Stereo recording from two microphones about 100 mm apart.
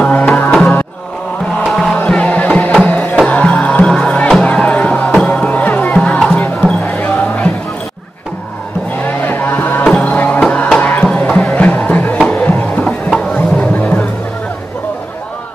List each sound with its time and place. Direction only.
0.0 s music: 15° left (ahead or behind)
1.6 s music: centre (ahead or behind)
2.0 s music: 10° left (ahead or behind)
8.9 s music: 20° left (ahead or behind)
12.8 s music: 5° left (ahead or behind)